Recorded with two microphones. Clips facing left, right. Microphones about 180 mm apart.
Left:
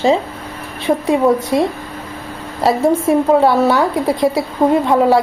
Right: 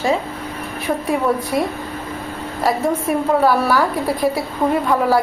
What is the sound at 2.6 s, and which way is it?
A woman's voice, 25° left (ahead or behind).